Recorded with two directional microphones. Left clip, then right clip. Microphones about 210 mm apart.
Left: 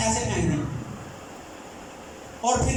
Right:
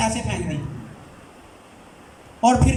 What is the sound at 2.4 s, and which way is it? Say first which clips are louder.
Speech: right 6 dB; 55° right (ahead or behind).